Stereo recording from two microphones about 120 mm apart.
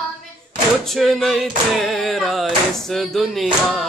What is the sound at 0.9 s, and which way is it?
Singing, centre (ahead or behind).